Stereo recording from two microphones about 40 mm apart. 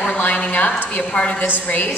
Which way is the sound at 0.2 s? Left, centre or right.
Left.